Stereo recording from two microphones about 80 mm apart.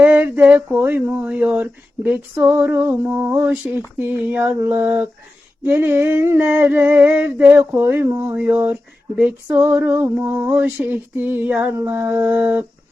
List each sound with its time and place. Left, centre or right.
0.0 s female singing: right